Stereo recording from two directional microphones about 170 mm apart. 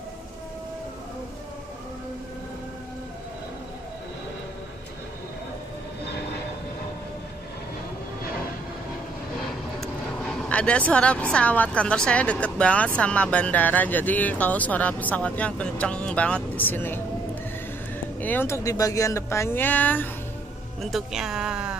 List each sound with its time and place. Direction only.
9.4 s speech: 5° left (ahead or behind)
18.2 s speech: 10° left (ahead or behind)
20.8 s speech: centre (ahead or behind)